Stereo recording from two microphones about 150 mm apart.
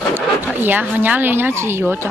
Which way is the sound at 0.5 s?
10° right (ahead or behind).